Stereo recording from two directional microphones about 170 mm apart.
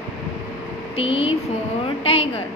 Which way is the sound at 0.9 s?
35° left (ahead or behind).